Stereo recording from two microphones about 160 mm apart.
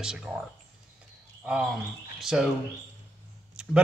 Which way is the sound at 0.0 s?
5° right (ahead or behind).